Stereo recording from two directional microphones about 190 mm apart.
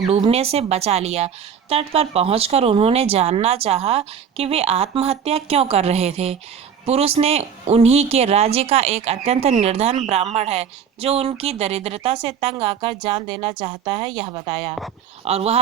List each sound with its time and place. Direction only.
0.1 s a woman's voice: 35° right (ahead or behind)